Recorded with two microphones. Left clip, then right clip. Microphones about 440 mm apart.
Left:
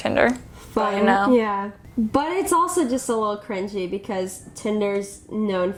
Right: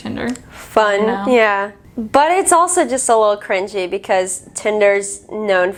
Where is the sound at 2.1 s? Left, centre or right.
Right.